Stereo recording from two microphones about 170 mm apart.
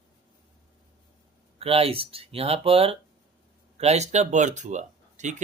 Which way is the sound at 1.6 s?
35° right (ahead or behind).